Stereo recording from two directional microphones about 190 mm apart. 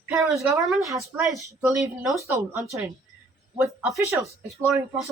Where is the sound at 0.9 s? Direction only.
15° right (ahead or behind).